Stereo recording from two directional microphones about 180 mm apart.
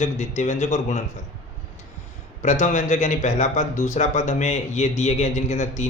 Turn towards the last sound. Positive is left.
turn(degrees=40)  # may be behind; listen again after turning